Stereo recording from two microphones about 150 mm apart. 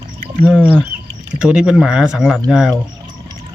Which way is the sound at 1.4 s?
5° right (ahead or behind).